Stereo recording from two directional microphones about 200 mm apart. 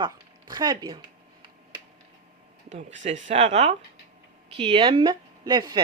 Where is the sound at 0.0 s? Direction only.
20° right (ahead or behind).